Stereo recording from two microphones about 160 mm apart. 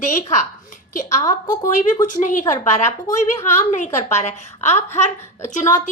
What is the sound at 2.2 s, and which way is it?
A woman's voice, 50° left (ahead or behind).